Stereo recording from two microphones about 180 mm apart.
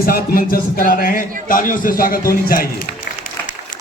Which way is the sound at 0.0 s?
60° left (ahead or behind).